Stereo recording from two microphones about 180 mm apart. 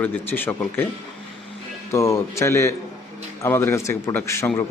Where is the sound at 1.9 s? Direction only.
15° left (ahead or behind).